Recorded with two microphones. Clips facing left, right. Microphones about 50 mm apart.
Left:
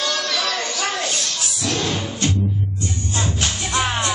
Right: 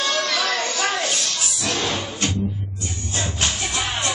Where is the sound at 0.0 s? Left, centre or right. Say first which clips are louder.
Right 1 dB; right.